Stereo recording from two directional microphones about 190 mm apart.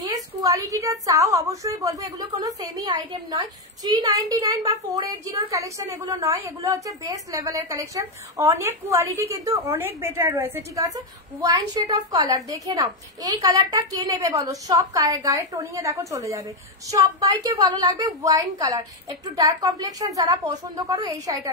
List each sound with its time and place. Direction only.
0.1 s a woman's voice: 15° right (ahead or behind)